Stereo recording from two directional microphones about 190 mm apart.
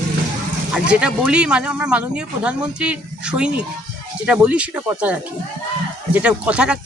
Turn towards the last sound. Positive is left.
turn(degrees=-5)  # may be behind; listen again after turning